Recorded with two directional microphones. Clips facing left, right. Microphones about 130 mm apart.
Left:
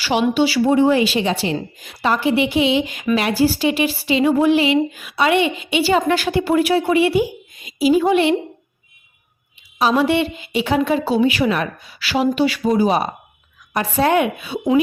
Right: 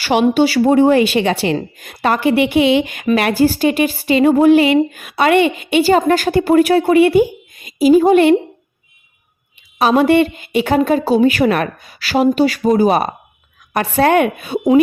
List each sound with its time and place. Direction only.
0.0 s a woman's voice: 50° right (ahead or behind)
9.7 s a woman's voice: 55° right (ahead or behind)